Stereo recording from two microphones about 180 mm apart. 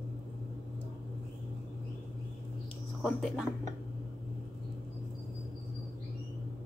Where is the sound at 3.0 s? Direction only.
Centre (ahead or behind).